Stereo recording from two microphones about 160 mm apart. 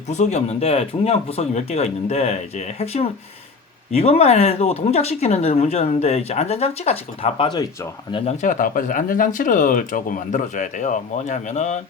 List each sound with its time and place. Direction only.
0.1 s speech: 45° left (ahead or behind); by 7.7 s 25° left (ahead or behind)
8.1 s speech: 40° left (ahead or behind)